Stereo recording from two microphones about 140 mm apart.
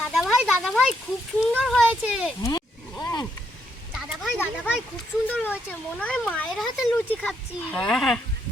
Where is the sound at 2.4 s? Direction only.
30° left (ahead or behind).